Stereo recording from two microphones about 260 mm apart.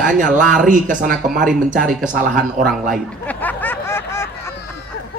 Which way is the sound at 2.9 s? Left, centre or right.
Centre.